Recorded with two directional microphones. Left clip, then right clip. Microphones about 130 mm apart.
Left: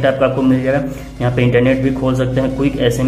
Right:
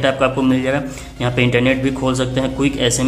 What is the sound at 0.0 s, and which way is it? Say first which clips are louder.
A man's voice: left 2 dB; 30° right (ahead or behind).